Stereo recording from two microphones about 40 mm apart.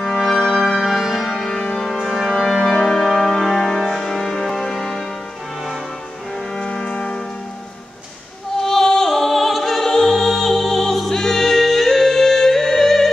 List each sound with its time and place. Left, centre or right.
0.0 s music: centre
0.7 s music: centre
1.8 s organ: centre
2.8 s music: centre
6.6 s music: centre
8.5 s music: centre